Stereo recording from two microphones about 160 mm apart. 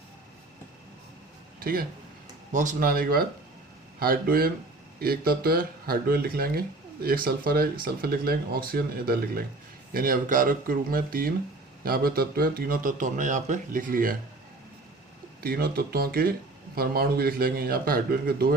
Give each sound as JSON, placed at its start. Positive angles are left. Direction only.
{"t": 1.5, "sound": "speech", "side_deg": -70}
{"t": 2.5, "sound": "a man's voice", "side_deg": -50}
{"t": 15.4, "sound": "speech", "side_deg": -70}